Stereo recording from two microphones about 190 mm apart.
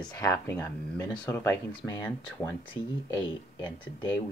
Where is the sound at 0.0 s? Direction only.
5° left (ahead or behind).